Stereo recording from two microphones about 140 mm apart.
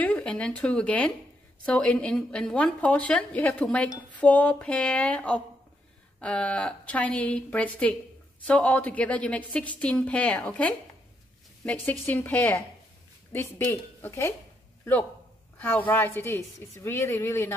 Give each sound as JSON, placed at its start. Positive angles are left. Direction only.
{"t": 0.0, "sound": "a woman's voice", "side_deg": 10}
{"t": 15.6, "sound": "a woman's voice", "side_deg": 15}